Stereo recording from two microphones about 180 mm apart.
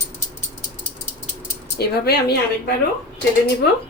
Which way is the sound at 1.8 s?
60° left (ahead or behind).